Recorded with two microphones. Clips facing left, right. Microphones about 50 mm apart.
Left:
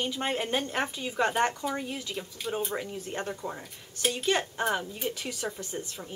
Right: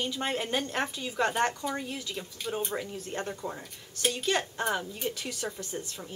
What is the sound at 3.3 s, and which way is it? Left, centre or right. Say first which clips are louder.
Speech: even; centre.